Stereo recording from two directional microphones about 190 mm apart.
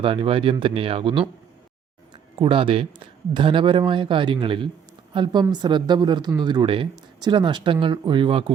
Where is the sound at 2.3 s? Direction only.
25° right (ahead or behind).